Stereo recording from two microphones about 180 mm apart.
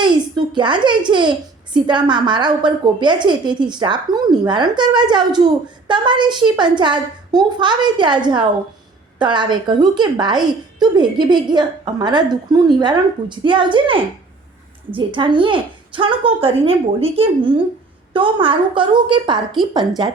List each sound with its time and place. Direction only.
0.0 s a woman's voice: 25° right (ahead or behind)